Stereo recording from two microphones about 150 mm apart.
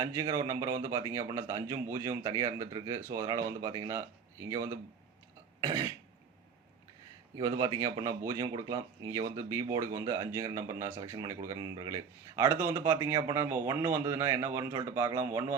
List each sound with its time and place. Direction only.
0.0 s speech: 25° right (ahead or behind)
7.3 s speech: 25° right (ahead or behind)